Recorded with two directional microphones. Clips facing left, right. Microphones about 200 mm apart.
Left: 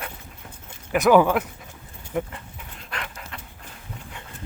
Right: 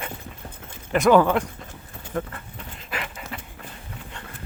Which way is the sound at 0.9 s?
5° left (ahead or behind).